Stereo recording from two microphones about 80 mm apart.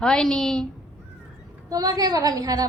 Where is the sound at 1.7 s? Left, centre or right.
Right.